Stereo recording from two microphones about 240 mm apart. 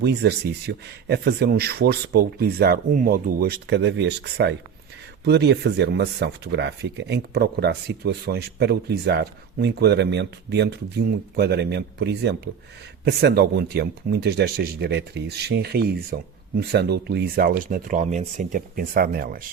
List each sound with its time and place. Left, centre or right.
0.0 s speech: right